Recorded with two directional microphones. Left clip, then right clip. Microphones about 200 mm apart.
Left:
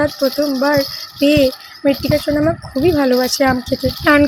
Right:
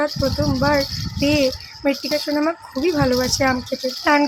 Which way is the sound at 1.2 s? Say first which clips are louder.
Left 6 dB; 15° left (ahead or behind).